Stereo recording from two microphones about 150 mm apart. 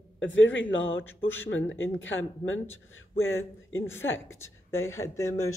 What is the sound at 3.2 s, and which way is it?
A woman's voice, 15° left (ahead or behind).